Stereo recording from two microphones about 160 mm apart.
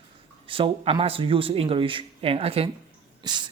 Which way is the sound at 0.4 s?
35° right (ahead or behind).